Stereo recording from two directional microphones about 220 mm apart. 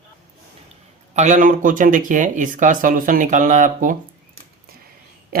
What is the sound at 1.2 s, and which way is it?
Speech, 35° right (ahead or behind).